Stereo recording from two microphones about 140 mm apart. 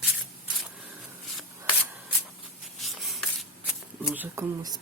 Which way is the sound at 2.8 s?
Centre (ahead or behind).